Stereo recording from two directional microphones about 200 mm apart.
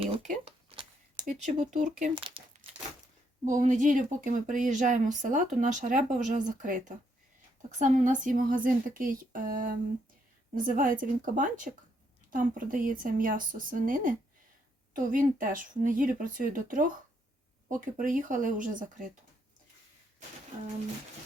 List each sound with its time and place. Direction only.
0.0 s a sound: 30° right (ahead or behind)
1.2 s speech: 40° right (ahead or behind)
2.1 s speech: 25° right (ahead or behind)
3.4 s a woman's voice: 40° right (ahead or behind)